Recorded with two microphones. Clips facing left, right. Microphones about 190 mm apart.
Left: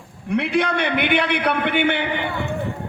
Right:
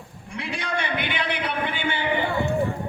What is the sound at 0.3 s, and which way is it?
A man's voice, 60° left (ahead or behind).